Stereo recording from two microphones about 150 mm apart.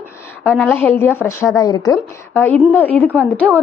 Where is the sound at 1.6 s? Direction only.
25° left (ahead or behind).